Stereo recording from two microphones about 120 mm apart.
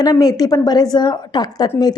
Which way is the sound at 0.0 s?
30° left (ahead or behind).